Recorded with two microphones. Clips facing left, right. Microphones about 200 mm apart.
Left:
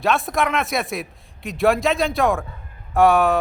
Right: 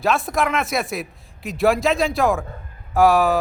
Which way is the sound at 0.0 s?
Centre (ahead or behind).